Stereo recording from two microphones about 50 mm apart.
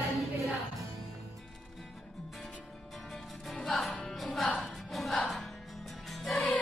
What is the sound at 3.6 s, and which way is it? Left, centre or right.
Music, centre.